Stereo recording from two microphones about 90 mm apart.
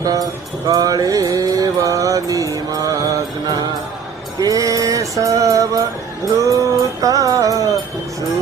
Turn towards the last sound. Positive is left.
turn(degrees=-40)  # may be behind; listen again after turning